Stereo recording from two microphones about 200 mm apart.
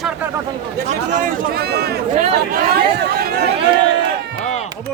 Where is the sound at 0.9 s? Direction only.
40° right (ahead or behind).